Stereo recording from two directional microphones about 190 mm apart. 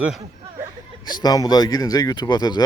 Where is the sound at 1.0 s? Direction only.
20° left (ahead or behind).